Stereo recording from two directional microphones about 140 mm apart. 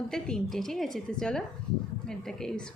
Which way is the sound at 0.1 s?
5° left (ahead or behind).